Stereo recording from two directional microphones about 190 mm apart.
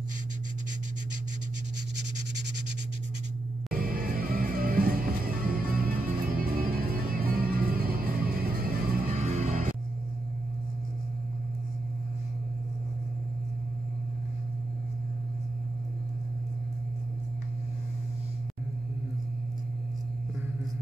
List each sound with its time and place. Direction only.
3.7 s music: 50° right (ahead or behind)
9.2 s music: 35° right (ahead or behind)